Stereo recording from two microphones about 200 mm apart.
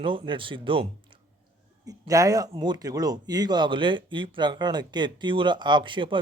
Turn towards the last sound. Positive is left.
turn(degrees=-25)  # may be behind; listen again after turning